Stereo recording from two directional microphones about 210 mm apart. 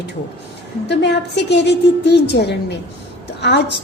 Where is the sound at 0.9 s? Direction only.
55° left (ahead or behind).